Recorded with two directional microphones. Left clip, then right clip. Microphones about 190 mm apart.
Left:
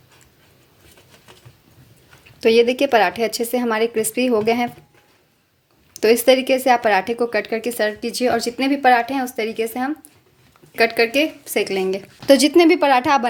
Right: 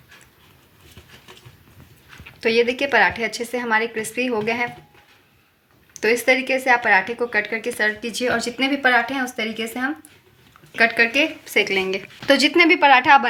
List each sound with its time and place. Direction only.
2.4 s speech: 45° left (ahead or behind)
5.9 s speech: 55° left (ahead or behind)
10.8 s speech: 55° left (ahead or behind)